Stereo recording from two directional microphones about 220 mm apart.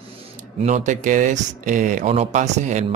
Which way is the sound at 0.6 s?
30° right (ahead or behind).